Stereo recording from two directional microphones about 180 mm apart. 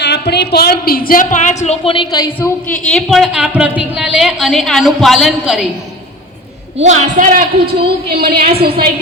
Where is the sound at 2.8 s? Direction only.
Centre (ahead or behind).